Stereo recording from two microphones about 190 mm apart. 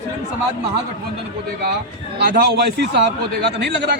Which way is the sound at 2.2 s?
55° right (ahead or behind).